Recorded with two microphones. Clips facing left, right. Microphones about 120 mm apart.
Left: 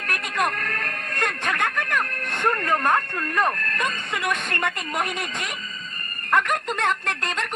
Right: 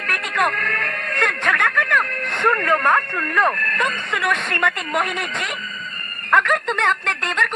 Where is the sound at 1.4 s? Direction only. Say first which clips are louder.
Right 5 dB; 65° right (ahead or behind).